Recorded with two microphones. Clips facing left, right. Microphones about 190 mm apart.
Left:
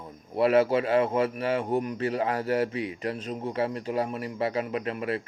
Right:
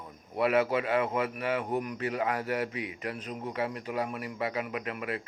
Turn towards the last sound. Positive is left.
turn(degrees=30)  # may be behind; listen again after turning